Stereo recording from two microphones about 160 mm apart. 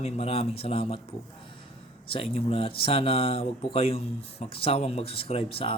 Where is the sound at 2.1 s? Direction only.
35° left (ahead or behind).